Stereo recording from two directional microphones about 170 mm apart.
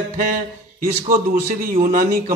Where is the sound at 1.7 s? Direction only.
50° right (ahead or behind).